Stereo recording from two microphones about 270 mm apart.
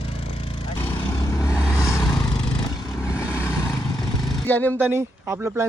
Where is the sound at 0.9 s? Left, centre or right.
Centre.